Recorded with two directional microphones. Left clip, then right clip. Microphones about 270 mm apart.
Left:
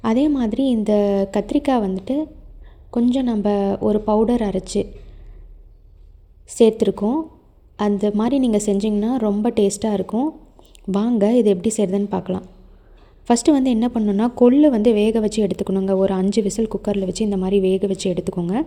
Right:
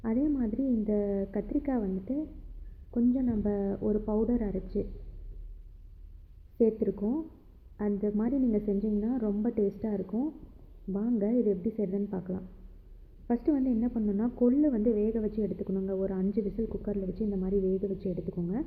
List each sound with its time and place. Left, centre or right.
0.0 s a woman's voice: left
6.6 s a woman's voice: left